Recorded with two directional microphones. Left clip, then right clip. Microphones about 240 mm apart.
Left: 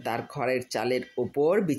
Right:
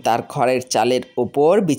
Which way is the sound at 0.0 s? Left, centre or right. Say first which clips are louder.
Right 12 dB; right.